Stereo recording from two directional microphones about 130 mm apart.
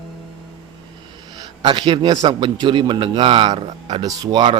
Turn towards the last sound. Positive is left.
turn(degrees=-35)  # may be behind; listen again after turning